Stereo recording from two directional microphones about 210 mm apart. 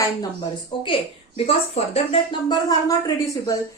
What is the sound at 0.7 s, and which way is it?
Speech, 25° left (ahead or behind).